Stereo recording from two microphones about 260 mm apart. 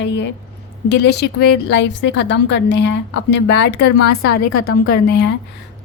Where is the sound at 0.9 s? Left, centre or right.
Left.